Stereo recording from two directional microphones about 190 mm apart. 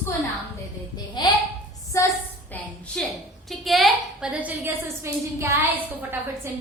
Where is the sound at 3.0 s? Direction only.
5° left (ahead or behind).